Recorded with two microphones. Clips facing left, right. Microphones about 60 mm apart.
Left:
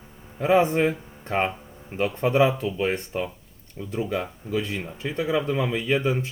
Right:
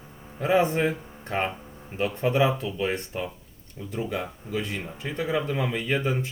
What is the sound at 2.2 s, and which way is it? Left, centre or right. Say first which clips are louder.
Speech: left 3 dB; left.